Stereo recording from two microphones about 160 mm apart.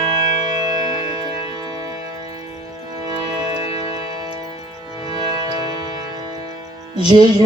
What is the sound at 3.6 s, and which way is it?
Music, 35° left (ahead or behind).